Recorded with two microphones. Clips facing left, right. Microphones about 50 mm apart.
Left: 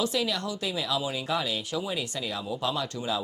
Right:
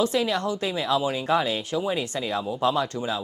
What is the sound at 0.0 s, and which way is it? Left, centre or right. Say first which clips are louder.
Speech: right 5 dB; right.